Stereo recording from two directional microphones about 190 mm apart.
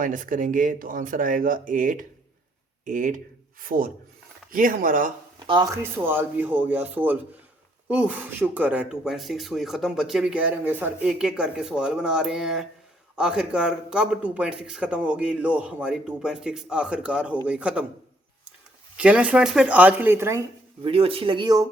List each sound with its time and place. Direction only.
0.0 s speech: 45° right (ahead or behind)
5.5 s speech: 20° right (ahead or behind)
18.9 s speech: 5° right (ahead or behind)
20.8 s speech: 30° right (ahead or behind)